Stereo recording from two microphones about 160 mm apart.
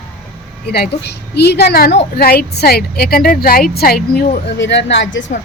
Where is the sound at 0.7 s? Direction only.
85° left.